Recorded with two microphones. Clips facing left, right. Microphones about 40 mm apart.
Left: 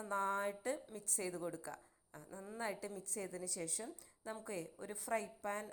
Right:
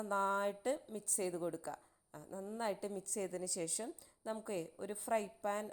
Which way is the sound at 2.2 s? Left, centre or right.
Left.